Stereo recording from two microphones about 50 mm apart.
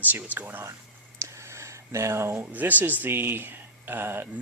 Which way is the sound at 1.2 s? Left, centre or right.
Right.